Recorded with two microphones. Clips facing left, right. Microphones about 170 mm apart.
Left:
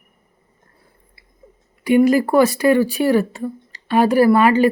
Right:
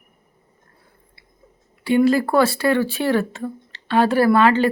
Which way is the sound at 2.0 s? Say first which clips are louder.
Left 2 dB; 15° left (ahead or behind).